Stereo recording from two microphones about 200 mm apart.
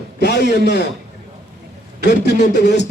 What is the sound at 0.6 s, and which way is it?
Speech, 60° left (ahead or behind).